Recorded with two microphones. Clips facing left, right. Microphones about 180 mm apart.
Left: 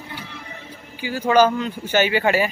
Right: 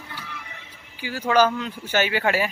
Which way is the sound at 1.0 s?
Centre (ahead or behind).